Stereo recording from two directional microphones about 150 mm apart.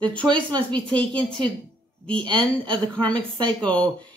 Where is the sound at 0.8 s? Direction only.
30° right (ahead or behind).